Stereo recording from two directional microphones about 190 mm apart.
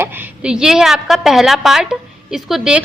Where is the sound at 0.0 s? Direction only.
5° right (ahead or behind).